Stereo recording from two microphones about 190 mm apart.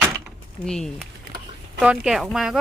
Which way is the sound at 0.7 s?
5° left (ahead or behind).